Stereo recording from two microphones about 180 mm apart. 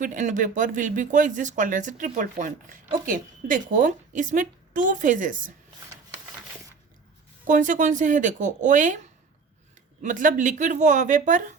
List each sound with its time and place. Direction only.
0.0 s speech: 45° right (ahead or behind)
7.4 s speech: 45° right (ahead or behind)
10.0 s speech: 45° right (ahead or behind)